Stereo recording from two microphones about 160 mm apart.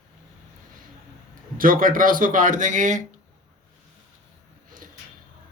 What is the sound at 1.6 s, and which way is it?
Speech, 60° right (ahead or behind).